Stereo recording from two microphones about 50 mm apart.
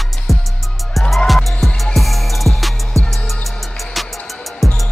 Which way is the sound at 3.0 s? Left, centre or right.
Right.